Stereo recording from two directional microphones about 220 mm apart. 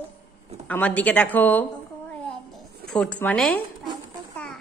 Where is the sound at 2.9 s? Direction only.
5° left (ahead or behind).